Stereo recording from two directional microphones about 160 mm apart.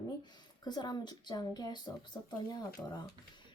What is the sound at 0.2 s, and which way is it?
A woman's voice, 25° left (ahead or behind).